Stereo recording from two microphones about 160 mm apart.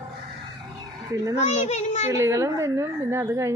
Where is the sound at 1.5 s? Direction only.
45° left (ahead or behind).